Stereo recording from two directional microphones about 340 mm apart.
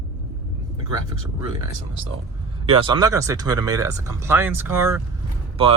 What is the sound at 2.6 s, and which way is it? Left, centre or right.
Speech, centre.